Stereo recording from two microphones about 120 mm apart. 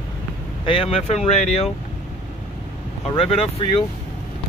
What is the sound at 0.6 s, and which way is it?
Speech, 50° left (ahead or behind).